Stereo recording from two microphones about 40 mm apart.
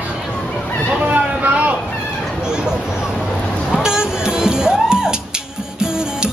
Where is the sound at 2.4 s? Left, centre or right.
Centre.